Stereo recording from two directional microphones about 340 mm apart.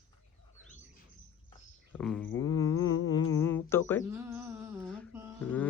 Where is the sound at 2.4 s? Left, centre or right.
Centre.